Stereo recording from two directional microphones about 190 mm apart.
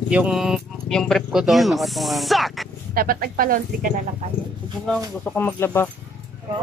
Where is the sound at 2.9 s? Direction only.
50° right (ahead or behind).